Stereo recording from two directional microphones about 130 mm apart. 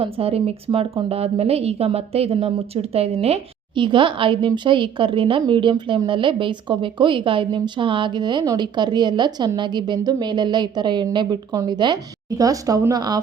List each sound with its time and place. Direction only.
0.0 s a woman's voice: 50° right (ahead or behind)
3.8 s a woman's voice: 40° right (ahead or behind)